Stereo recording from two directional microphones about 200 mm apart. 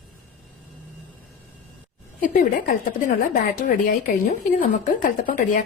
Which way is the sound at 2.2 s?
45° left (ahead or behind).